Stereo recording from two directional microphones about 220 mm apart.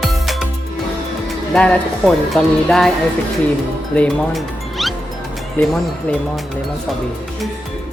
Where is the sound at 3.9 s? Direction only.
5° left (ahead or behind).